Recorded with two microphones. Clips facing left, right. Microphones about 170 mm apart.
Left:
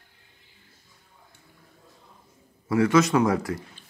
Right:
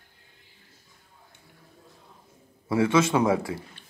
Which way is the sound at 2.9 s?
25° right (ahead or behind).